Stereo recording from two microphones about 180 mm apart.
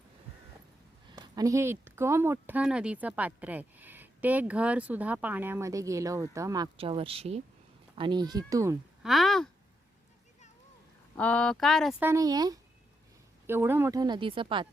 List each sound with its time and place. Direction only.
1.1 s speech: 20° right (ahead or behind)
6.7 s speech: 30° right (ahead or behind)
9.0 s speech: centre (ahead or behind)
11.2 s speech: 5° left (ahead or behind)
11.9 s speech: 15° right (ahead or behind)